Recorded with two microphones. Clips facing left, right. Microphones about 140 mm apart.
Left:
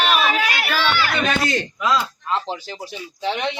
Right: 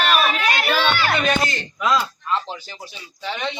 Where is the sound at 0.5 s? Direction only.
25° right (ahead or behind).